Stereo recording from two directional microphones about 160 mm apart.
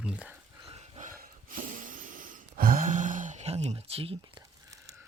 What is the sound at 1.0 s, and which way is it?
Gasp, 60° right (ahead or behind).